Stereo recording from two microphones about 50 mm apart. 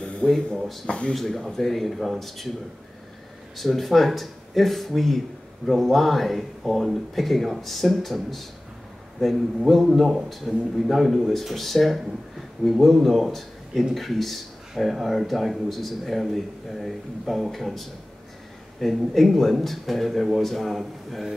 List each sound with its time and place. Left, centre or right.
0.0 s a sound: centre
0.8 s speech: left
1.1 s a man's voice: centre
3.5 s a man's voice: centre